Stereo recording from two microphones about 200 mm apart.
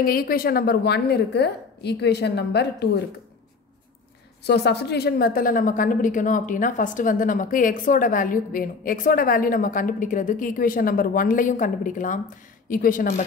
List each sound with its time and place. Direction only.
0.0 s a woman's voice: 45° left (ahead or behind)
4.5 s a woman's voice: 55° left (ahead or behind)